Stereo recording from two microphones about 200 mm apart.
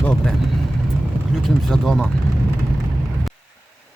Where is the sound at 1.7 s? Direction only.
Centre (ahead or behind).